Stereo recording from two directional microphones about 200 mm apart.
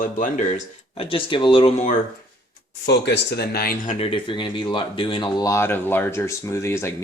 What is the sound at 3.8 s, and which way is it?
Speech, 25° left (ahead or behind).